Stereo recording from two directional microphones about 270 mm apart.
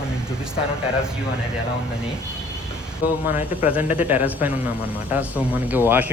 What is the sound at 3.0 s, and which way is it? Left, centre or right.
Speech, left.